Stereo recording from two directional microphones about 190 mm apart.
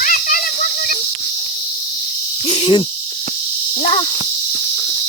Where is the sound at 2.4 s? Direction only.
35° left (ahead or behind).